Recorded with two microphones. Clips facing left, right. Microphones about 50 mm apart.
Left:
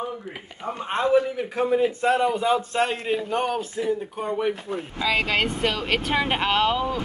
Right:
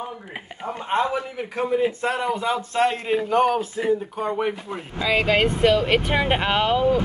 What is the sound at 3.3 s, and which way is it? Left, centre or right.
Speech, centre.